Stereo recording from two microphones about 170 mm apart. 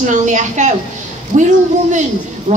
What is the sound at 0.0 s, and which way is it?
A woman's voice, 45° right (ahead or behind).